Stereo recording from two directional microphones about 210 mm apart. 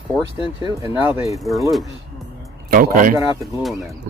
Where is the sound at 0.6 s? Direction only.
15° right (ahead or behind).